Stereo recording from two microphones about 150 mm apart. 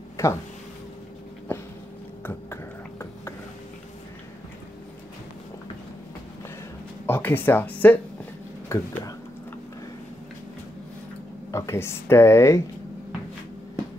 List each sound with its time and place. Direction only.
0.2 s speech: 20° left (ahead or behind)
1.5 s a sound: 15° left (ahead or behind)
7.1 s speech: 15° left (ahead or behind)
11.5 s speech: 20° left (ahead or behind)